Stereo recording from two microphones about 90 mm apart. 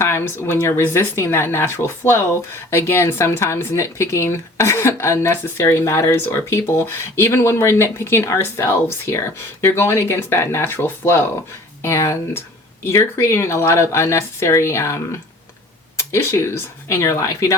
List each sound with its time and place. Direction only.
0.0 s speech: 25° left (ahead or behind)